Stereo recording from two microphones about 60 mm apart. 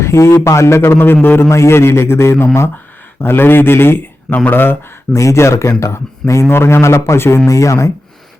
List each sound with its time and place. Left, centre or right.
0.0 s a man's voice: left
0.9 s a man's voice: left
1.5 s a man's voice: left
5.1 s a man's voice: left
7.4 s speech: left